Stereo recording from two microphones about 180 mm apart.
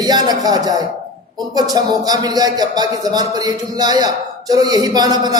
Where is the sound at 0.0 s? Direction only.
20° right (ahead or behind).